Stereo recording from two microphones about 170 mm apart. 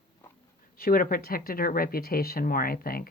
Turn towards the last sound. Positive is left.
turn(degrees=60)  # may be behind; listen again after turning